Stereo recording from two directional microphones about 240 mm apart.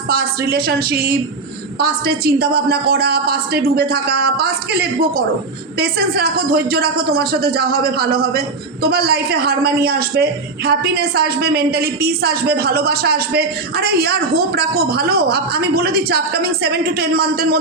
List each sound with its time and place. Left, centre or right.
0.1 s speech: right